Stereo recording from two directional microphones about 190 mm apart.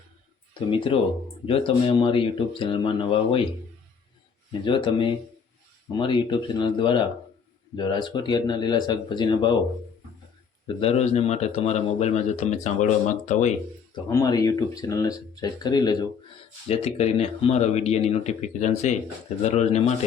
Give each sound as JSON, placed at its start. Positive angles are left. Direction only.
{"t": 1.5, "sound": "speech", "side_deg": 30}
{"t": 4.6, "sound": "speech", "side_deg": 25}
{"t": 10.8, "sound": "speech", "side_deg": 35}
{"t": 13.9, "sound": "speech", "side_deg": 20}
{"t": 16.6, "sound": "speech", "side_deg": 30}